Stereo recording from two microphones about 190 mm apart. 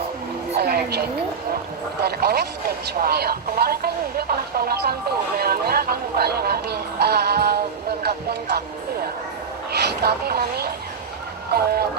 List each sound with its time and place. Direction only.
0.5 s a woman's voice: 55° right (ahead or behind)
2.0 s speech: 55° right (ahead or behind)
8.0 s a sound: 60° right (ahead or behind)
9.7 s speech: 60° right (ahead or behind)